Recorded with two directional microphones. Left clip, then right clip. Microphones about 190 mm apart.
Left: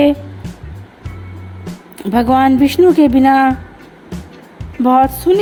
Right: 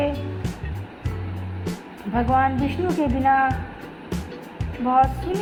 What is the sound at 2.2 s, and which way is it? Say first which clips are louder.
Speech: left 9 dB; 45° left (ahead or behind).